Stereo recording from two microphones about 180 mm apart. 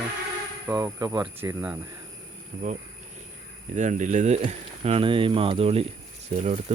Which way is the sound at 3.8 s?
45° right (ahead or behind).